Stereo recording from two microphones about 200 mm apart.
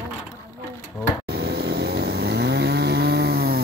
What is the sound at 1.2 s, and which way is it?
Chainsaw, 50° right (ahead or behind).